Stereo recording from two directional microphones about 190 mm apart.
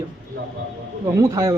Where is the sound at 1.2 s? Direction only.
15° right (ahead or behind).